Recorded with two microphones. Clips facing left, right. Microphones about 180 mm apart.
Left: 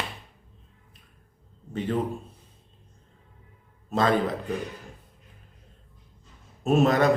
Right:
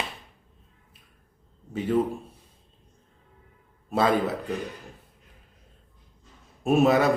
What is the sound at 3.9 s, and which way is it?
Speech, 10° right (ahead or behind).